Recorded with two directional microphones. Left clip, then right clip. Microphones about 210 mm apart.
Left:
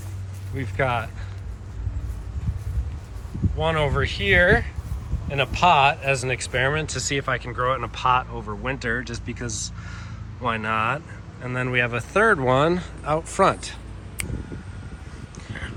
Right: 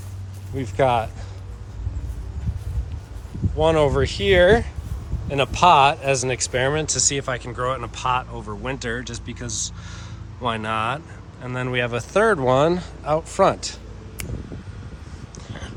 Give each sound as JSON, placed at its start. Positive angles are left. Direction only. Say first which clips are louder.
{"t": 0.5, "sound": "speech", "louder": "right 5 dB", "side_deg": -15}
{"t": 3.6, "sound": "speech", "louder": "right 5 dB", "side_deg": -15}
{"t": 15.4, "sound": "a sound", "louder": "left 3 dB", "side_deg": -15}